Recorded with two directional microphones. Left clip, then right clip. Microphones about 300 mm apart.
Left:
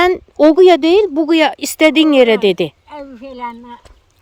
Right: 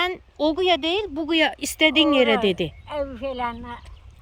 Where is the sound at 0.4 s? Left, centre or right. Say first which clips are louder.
Left 12 dB; centre.